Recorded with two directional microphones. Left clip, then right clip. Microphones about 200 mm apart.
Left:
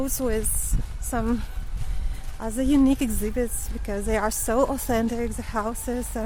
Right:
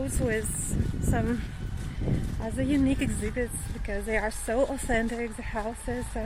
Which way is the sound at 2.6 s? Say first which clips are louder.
Left 6 dB; 25° left (ahead or behind).